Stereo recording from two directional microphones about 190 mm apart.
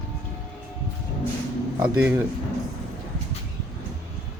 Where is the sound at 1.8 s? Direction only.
5° right (ahead or behind).